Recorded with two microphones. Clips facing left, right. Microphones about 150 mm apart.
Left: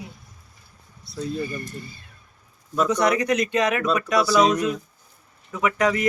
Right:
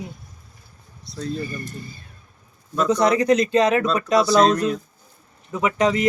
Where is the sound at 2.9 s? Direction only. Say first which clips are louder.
Right 5 dB; 30° right (ahead or behind).